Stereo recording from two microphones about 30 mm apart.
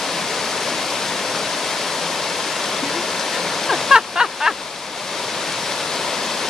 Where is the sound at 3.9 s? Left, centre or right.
Centre.